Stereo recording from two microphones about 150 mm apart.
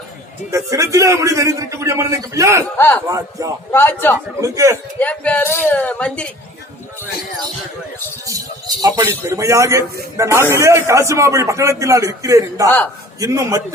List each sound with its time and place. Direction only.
0.5 s a man's voice: 20° right (ahead or behind)
2.7 s speech: 15° left (ahead or behind)
3.1 s a man's voice: 20° right (ahead or behind)
3.7 s speech: 15° left (ahead or behind)
4.4 s a man's voice: 20° right (ahead or behind)
4.9 s speech: 10° left (ahead or behind)
8.8 s a man's voice: 25° right (ahead or behind)